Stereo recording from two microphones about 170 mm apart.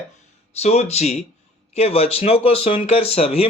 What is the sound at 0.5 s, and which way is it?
Speech, 40° left (ahead or behind).